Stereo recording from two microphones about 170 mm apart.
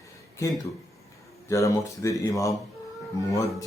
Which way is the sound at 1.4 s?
20° left (ahead or behind).